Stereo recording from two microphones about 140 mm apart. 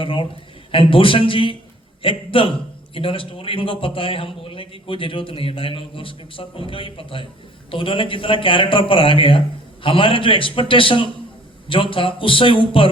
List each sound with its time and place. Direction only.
0.0 s a man's voice: 40° left (ahead or behind)